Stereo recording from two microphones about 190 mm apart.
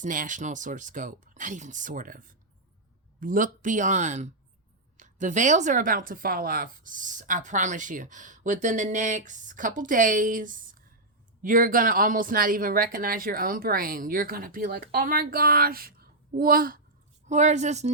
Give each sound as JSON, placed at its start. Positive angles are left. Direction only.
{"t": 0.0, "sound": "speech", "side_deg": -45}
{"t": 17.2, "sound": "speech", "side_deg": -40}